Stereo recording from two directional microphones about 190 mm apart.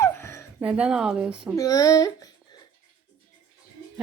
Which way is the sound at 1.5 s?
20° left (ahead or behind).